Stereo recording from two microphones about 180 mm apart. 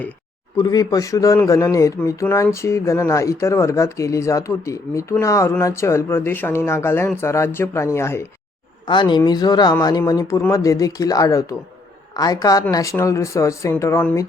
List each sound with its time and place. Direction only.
0.5 s speech: 20° left (ahead or behind)
8.9 s speech: 25° left (ahead or behind)